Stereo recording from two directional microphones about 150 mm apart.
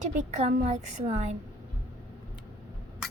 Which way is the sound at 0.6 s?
50° right (ahead or behind).